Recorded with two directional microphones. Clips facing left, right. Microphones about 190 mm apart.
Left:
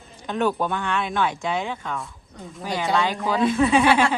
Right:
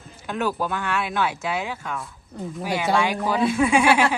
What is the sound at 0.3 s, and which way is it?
Speech, 5° right (ahead or behind).